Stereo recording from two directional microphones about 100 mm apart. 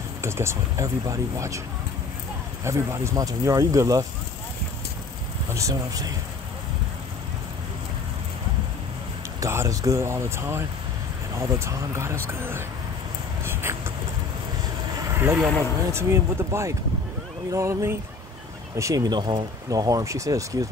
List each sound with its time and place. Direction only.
0.2 s speech: 25° right (ahead or behind)
2.6 s speech: 30° right (ahead or behind)
5.5 s speech: 35° right (ahead or behind)
9.4 s speech: 30° right (ahead or behind)
13.5 s a sound: 25° right (ahead or behind)
15.0 s vehicle: 25° right (ahead or behind)
15.9 s speech: 25° right (ahead or behind)